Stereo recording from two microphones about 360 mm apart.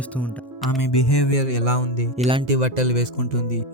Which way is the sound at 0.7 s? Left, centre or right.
Left.